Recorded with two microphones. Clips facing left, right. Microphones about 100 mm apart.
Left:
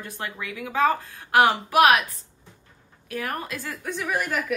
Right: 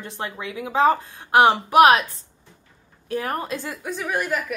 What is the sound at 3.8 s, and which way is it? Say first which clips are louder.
Speech: right 2 dB; centre (ahead or behind).